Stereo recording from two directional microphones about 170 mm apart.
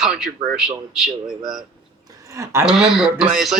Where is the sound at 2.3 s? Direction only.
15° right (ahead or behind).